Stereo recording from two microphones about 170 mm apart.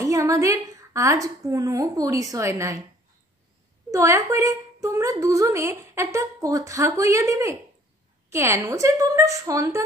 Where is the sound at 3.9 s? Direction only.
15° right (ahead or behind).